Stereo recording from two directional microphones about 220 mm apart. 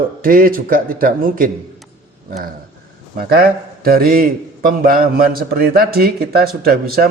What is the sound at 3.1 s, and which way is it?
A man's voice, 45° right (ahead or behind).